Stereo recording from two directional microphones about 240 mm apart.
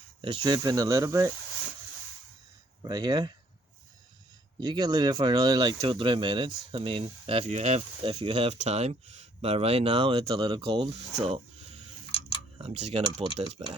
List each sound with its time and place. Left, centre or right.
0.2 s speech: centre
2.8 s speech: centre
4.6 s speech: centre